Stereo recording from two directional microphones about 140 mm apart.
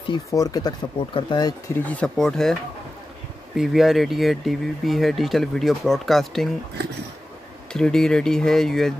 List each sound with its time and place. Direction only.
0.1 s speech: 25° left (ahead or behind)
1.9 s speech: 5° left (ahead or behind)
3.5 s speech: centre (ahead or behind)
7.7 s speech: 5° left (ahead or behind)